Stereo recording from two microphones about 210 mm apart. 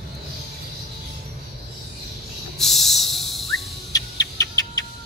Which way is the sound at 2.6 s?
Centre (ahead or behind).